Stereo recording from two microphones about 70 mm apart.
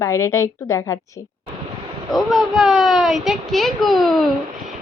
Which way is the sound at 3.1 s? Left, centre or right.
Centre.